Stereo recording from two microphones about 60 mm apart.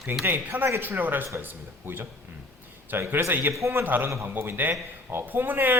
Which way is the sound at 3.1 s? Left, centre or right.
Right.